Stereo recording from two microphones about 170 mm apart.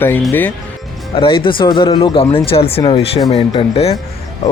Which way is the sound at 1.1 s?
30° left (ahead or behind).